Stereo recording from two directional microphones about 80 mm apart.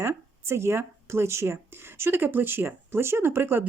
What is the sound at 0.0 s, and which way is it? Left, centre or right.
Speech, right.